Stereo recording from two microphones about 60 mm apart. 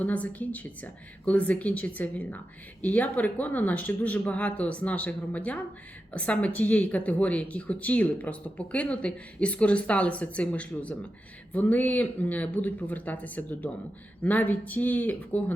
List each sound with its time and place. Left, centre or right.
0.0 s speech: left